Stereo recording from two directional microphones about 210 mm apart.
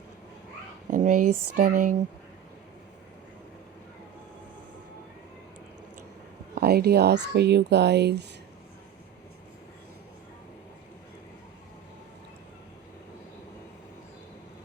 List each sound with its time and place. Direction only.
0.9 s speech: 40° right (ahead or behind)
6.6 s speech: 50° right (ahead or behind)